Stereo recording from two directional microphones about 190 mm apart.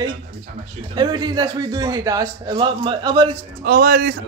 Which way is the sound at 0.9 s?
25° right (ahead or behind).